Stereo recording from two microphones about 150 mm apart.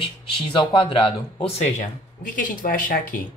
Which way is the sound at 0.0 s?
35° left (ahead or behind).